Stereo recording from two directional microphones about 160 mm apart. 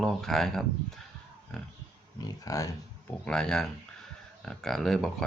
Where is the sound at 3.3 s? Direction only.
5° left (ahead or behind).